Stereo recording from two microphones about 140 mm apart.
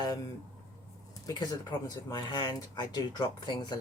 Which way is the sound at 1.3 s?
30° left (ahead or behind).